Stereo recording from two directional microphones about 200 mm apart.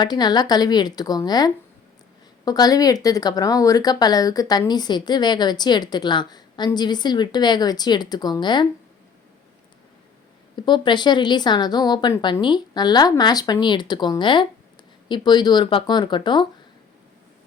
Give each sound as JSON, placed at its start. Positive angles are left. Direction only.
{"t": 0.0, "sound": "speech", "side_deg": 20}
{"t": 10.7, "sound": "speech", "side_deg": 20}